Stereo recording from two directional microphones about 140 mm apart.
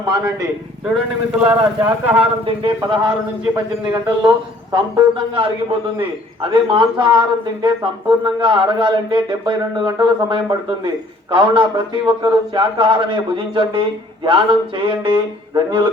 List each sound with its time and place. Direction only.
0.9 s speech: 5° right (ahead or behind)
2.6 s a man's voice: 35° right (ahead or behind)